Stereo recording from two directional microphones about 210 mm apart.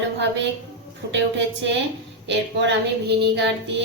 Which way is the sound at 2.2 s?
60° right (ahead or behind).